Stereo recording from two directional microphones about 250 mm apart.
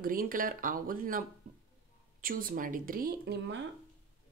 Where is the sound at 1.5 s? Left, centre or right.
Right.